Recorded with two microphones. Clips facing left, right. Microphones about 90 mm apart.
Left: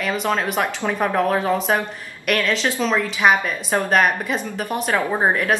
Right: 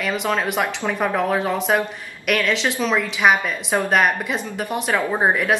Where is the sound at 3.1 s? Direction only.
Centre (ahead or behind).